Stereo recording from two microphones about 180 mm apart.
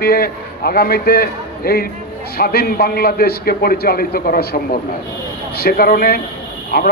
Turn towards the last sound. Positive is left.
turn(degrees=60)  # may be behind; listen again after turning